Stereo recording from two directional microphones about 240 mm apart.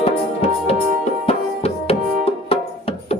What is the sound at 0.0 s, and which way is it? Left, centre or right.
Music, left.